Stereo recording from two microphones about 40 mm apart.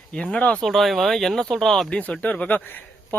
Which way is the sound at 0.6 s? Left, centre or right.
Centre.